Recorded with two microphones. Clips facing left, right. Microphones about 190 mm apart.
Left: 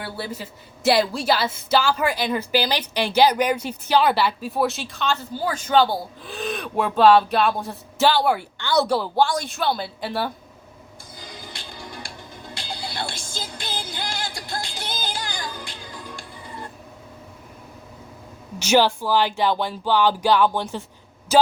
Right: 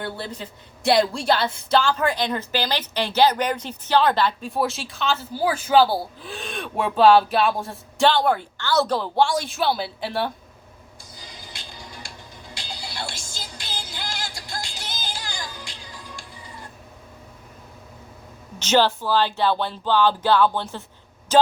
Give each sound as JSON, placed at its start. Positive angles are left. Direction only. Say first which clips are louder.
{"t": 0.0, "sound": "a woman's voice", "louder": "even", "side_deg": 5}
{"t": 12.5, "sound": "music", "louder": "left 3 dB", "side_deg": 55}
{"t": 18.6, "sound": "speech", "louder": "left 1 dB", "side_deg": 10}